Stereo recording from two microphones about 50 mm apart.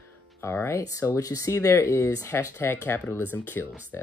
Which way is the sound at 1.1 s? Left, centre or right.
Left.